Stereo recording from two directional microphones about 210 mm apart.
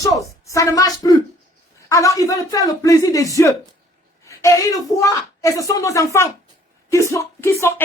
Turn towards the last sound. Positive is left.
turn(degrees=15)  # may be behind; listen again after turning